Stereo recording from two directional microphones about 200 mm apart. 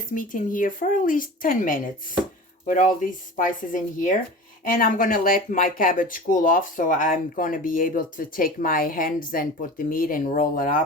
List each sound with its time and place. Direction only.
0.1 s speech: 40° left (ahead or behind)